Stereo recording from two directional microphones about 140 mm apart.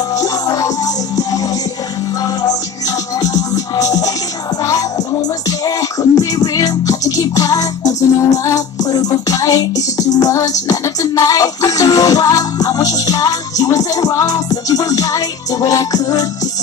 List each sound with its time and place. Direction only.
0.1 s music: 25° left (ahead or behind)
3.2 s music: 25° left (ahead or behind)
5.5 s music: 25° left (ahead or behind)